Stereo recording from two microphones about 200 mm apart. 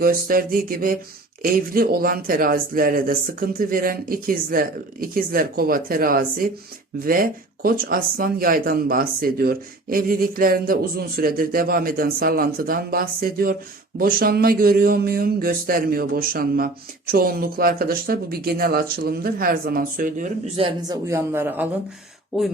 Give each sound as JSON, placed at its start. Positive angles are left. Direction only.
{"t": 0.0, "sound": "speech", "side_deg": -45}
{"t": 20.6, "sound": "speech", "side_deg": -20}